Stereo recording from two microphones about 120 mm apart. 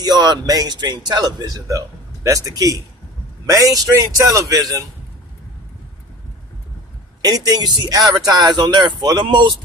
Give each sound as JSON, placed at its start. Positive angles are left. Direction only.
{"t": 0.0, "sound": "a man's voice", "side_deg": -35}
{"t": 7.2, "sound": "a man's voice", "side_deg": -35}